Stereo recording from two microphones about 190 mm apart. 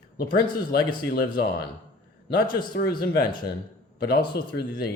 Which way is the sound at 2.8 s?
55° left (ahead or behind).